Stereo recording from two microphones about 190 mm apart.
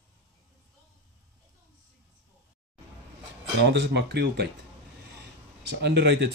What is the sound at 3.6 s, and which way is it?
Speech, 65° right (ahead or behind).